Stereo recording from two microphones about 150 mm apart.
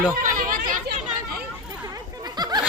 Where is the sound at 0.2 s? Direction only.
65° right (ahead or behind).